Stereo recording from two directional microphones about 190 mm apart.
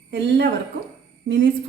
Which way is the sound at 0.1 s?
60° right (ahead or behind).